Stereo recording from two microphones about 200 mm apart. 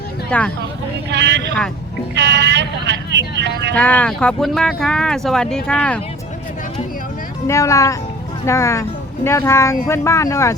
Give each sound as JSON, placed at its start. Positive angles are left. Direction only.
{"t": 0.3, "sound": "speech", "side_deg": 5}
{"t": 1.1, "sound": "speech", "side_deg": -60}
{"t": 3.8, "sound": "speech", "side_deg": 5}
{"t": 7.4, "sound": "speech", "side_deg": 15}